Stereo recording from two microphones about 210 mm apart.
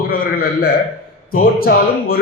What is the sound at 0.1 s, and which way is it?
A man's voice, 45° left (ahead or behind).